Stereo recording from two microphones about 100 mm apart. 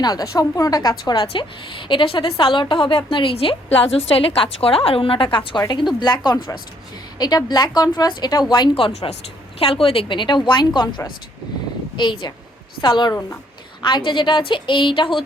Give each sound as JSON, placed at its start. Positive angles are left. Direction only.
{"t": 0.0, "sound": "a woman's voice", "side_deg": 40}
{"t": 8.8, "sound": "speech", "side_deg": 90}
{"t": 9.6, "sound": "a woman's voice", "side_deg": 70}